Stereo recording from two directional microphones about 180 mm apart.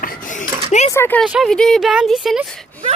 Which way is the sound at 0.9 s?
15° left (ahead or behind).